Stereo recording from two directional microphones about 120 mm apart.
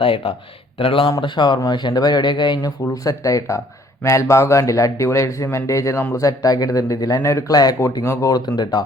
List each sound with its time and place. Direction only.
0.0 s a man's voice: 50° left (ahead or behind)